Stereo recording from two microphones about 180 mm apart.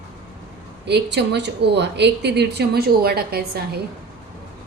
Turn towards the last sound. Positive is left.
turn(degrees=-60)  # may be behind; listen again after turning